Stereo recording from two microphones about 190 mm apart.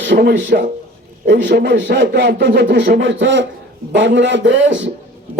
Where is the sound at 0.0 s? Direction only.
60° right (ahead or behind).